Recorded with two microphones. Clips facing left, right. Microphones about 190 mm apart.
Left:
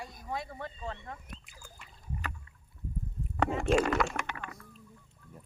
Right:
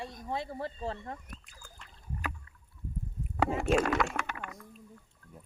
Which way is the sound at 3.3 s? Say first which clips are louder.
Even; 5° right (ahead or behind).